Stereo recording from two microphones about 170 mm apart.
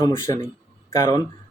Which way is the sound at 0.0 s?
20° left (ahead or behind).